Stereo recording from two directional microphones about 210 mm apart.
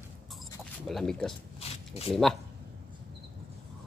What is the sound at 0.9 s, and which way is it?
Speech, centre (ahead or behind).